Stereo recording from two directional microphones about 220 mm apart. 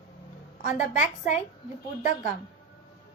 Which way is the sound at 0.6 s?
35° left (ahead or behind).